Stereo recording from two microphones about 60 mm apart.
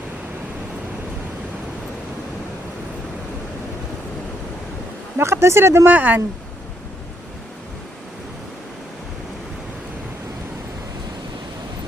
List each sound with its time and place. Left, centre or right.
5.1 s speech: right
5.9 s speech: right